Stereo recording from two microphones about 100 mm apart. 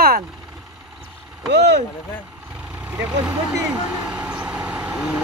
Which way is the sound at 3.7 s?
10° right (ahead or behind).